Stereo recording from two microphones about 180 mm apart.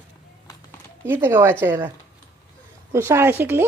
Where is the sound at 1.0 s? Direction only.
15° right (ahead or behind).